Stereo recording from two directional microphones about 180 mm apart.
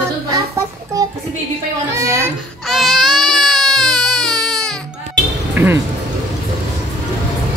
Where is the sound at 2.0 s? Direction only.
15° right (ahead or behind).